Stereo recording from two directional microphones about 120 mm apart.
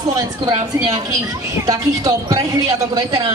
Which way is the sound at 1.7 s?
30° right (ahead or behind).